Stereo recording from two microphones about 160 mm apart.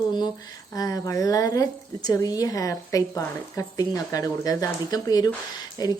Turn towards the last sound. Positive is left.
turn(degrees=25)  # may be behind; listen again after turning